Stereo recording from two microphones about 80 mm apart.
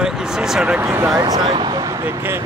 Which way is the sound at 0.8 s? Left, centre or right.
Right.